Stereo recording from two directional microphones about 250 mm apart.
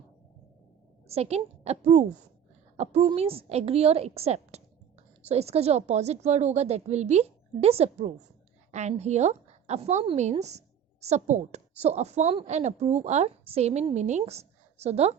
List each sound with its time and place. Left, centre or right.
1.0 s a woman's voice: right